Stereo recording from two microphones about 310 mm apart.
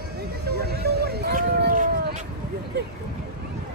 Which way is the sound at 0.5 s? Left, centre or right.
Right.